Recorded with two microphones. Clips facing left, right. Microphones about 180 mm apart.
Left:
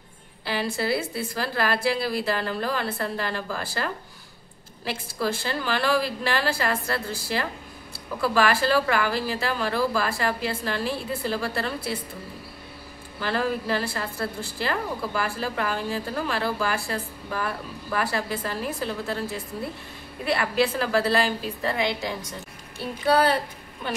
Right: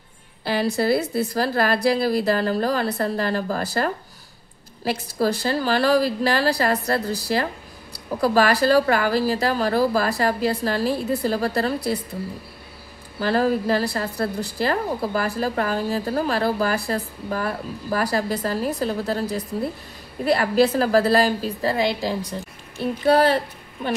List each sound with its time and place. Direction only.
0.5 s a woman's voice: 40° right (ahead or behind)
13.2 s a woman's voice: 40° right (ahead or behind)